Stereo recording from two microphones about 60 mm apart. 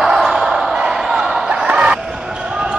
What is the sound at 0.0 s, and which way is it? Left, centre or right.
Basketball bounce, centre.